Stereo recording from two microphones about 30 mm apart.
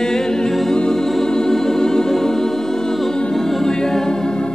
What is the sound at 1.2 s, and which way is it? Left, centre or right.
Organ, left.